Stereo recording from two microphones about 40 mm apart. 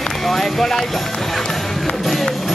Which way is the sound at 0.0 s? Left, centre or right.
Centre.